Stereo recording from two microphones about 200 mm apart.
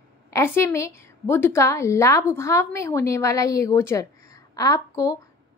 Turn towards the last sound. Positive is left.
turn(degrees=15)  # may be behind; listen again after turning